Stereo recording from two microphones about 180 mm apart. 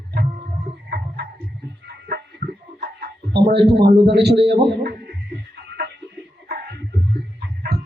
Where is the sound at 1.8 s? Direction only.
65° right (ahead or behind).